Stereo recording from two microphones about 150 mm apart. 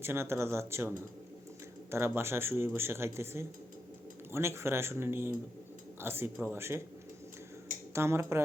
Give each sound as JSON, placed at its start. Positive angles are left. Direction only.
{"t": 0.0, "sound": "speech", "side_deg": -15}
{"t": 1.9, "sound": "speech", "side_deg": -15}
{"t": 7.9, "sound": "speech", "side_deg": -15}